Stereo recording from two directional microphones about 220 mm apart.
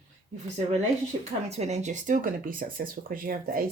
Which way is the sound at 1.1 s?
30° right (ahead or behind).